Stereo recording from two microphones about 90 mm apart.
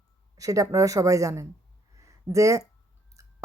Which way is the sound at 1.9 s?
35° right (ahead or behind).